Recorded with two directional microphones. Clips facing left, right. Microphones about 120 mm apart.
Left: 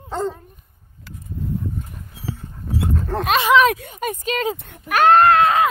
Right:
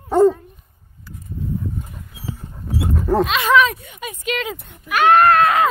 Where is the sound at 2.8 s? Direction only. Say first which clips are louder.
Right 6 dB; 10° right (ahead or behind).